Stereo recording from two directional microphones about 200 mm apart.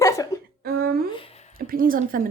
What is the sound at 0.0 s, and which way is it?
Cough, 15° left (ahead or behind).